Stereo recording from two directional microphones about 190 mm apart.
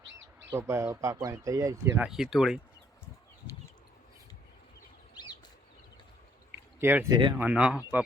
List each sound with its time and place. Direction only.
0.5 s speech: 15° right (ahead or behind)
2.0 s speech: centre (ahead or behind)
6.7 s speech: 10° right (ahead or behind)